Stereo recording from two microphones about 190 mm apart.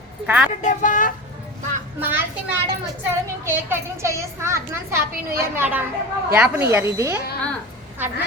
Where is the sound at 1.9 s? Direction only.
10° right (ahead or behind).